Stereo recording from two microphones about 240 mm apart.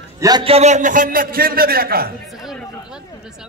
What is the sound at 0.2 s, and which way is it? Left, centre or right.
A man's voice, centre.